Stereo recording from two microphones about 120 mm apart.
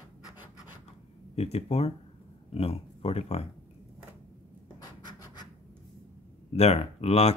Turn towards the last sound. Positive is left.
turn(degrees=55)  # may be behind; listen again after turning